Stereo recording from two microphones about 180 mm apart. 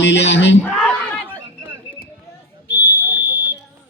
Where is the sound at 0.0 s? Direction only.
80° left.